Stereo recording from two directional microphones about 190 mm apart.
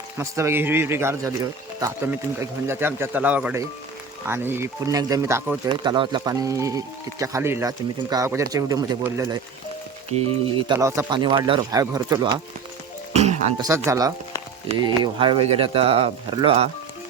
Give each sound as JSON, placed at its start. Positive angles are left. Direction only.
{"t": 0.2, "sound": "speech", "side_deg": -15}
{"t": 10.7, "sound": "speech", "side_deg": -15}
{"t": 13.1, "sound": "music", "side_deg": -35}
{"t": 13.6, "sound": "speech", "side_deg": -15}